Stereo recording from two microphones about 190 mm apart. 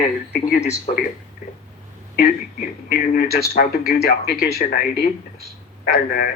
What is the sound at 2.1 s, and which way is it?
Speech, 50° left (ahead or behind).